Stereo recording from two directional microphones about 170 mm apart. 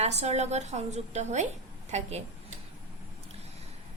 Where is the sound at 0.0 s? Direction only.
40° right (ahead or behind).